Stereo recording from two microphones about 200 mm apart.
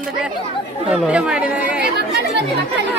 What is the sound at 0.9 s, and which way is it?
Speech, 5° right (ahead or behind).